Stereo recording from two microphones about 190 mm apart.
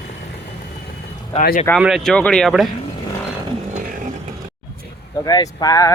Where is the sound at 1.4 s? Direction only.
50° left (ahead or behind).